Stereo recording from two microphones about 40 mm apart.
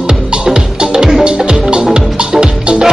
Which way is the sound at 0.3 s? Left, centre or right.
Right.